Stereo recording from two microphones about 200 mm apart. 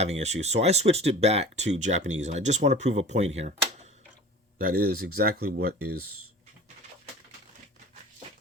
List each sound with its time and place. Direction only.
0.0 s speech: 35° right (ahead or behind)
4.5 s speech: 45° right (ahead or behind)